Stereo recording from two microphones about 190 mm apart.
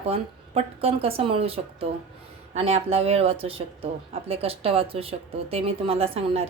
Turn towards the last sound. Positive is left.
turn(degrees=-30)  # may be behind; listen again after turning